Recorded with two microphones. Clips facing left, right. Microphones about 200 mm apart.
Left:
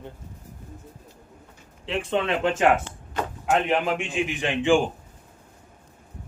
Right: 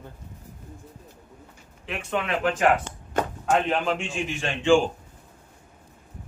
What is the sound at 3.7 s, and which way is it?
A man's voice, 15° left (ahead or behind).